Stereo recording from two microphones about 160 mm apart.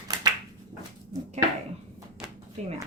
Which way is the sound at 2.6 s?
45° right (ahead or behind).